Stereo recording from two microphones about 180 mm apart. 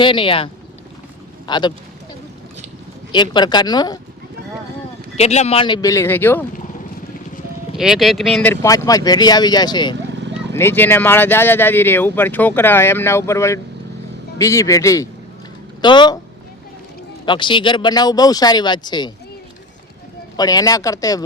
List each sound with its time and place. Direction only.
0.0 s speech: 30° left (ahead or behind)
3.1 s speech: 25° left (ahead or behind)
5.1 s speech: 35° left (ahead or behind); by 6.4 s 10° left (ahead or behind)
7.8 s speech: centre (ahead or behind)
8.6 s speech: 20° left (ahead or behind)
10.5 s speech: 15° left (ahead or behind)
17.2 s speech: 25° left (ahead or behind)
20.3 s speech: 20° left (ahead or behind)